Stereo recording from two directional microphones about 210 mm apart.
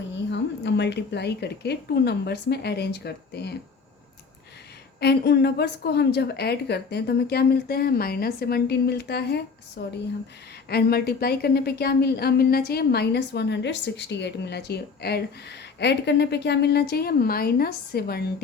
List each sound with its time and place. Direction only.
0.3 s speech: 55° left (ahead or behind)
4.9 s speech: 50° left (ahead or behind)